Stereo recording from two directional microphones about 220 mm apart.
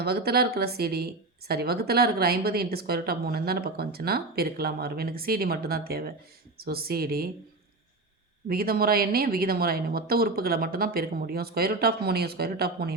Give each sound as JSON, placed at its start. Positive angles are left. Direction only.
{"t": 0.0, "sound": "a woman's voice", "side_deg": -45}
{"t": 8.4, "sound": "a woman's voice", "side_deg": -45}